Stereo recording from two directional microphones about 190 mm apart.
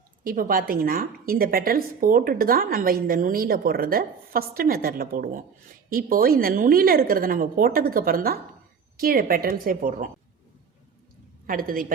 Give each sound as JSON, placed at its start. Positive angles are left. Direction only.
{"t": 0.3, "sound": "a woman's voice", "side_deg": -45}
{"t": 11.4, "sound": "a woman's voice", "side_deg": -50}